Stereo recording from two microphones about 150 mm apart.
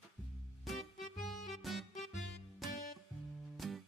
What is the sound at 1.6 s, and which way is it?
Music, centre (ahead or behind).